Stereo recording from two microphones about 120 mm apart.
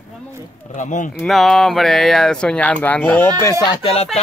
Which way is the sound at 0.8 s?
90° left.